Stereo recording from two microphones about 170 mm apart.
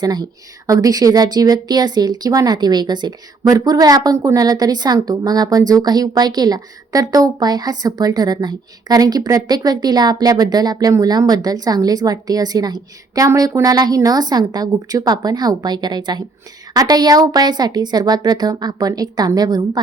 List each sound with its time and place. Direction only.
0.0 s speech: 25° right (ahead or behind)